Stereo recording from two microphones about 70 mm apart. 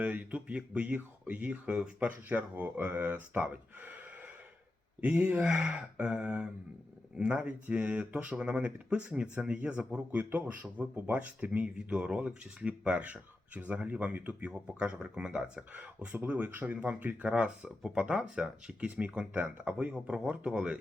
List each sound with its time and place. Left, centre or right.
0.0 s speech: centre
4.9 s speech: right